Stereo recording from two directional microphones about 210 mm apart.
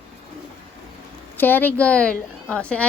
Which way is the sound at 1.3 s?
10° left (ahead or behind).